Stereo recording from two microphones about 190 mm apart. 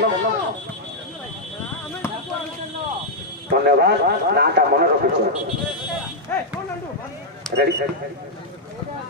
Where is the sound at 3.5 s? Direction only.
55° right (ahead or behind).